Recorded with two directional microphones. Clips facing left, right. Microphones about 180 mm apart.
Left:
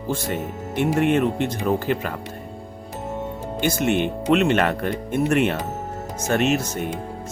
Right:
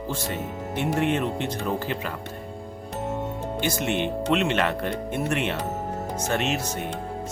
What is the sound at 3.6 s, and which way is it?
Speech, 50° left (ahead or behind).